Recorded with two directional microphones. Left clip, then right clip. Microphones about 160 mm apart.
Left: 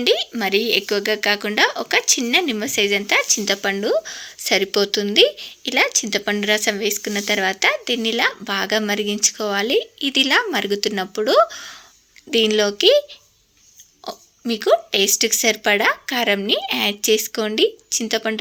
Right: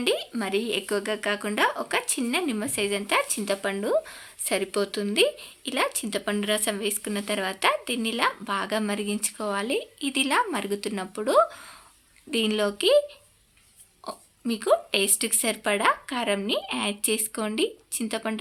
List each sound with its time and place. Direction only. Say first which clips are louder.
0.0 s speech: left 8 dB; 25° left (ahead or behind)
14.0 s speech: left 5 dB; 25° left (ahead or behind)